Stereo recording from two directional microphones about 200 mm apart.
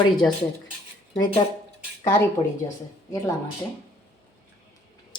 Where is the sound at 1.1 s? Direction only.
20° left (ahead or behind).